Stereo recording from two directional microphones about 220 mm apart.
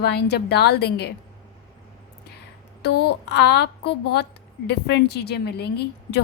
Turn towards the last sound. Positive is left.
turn(degrees=50)  # may be behind; listen again after turning